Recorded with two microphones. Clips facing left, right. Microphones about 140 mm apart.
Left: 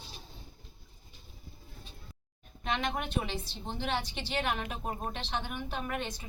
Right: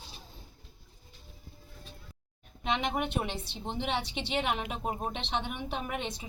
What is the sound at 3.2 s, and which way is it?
Speech, 65° right (ahead or behind).